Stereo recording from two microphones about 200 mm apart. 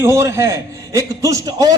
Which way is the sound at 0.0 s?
15° right (ahead or behind).